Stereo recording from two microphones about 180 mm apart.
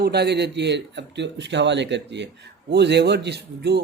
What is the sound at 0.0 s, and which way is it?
Speech, 65° right (ahead or behind).